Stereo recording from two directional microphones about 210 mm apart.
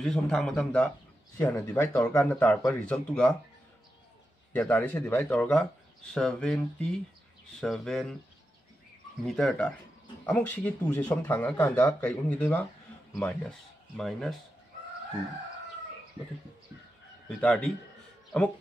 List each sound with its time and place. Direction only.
0.0 s a man's voice: centre (ahead or behind)
4.5 s a man's voice: 5° left (ahead or behind)
9.2 s a man's voice: centre (ahead or behind)
17.3 s a man's voice: 5° left (ahead or behind)